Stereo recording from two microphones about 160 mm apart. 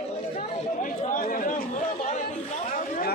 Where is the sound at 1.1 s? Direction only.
60° left (ahead or behind).